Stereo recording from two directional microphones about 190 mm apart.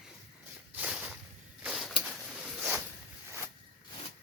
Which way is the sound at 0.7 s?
5° right (ahead or behind).